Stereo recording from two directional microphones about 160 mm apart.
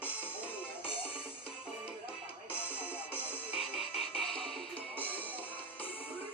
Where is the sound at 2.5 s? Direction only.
15° left (ahead or behind).